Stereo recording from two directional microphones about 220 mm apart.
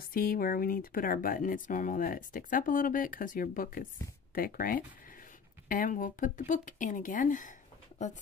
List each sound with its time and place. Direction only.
0.0 s speech: 40° left (ahead or behind)